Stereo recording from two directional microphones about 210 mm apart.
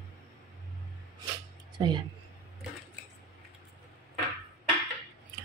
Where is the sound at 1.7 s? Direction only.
20° right (ahead or behind).